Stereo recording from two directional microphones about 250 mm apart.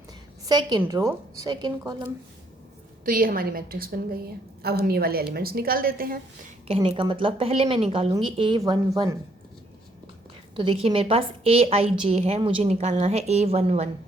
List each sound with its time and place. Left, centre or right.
0.4 s a woman's voice: centre
3.0 s a woman's voice: right
6.7 s a woman's voice: right
10.6 s a woman's voice: right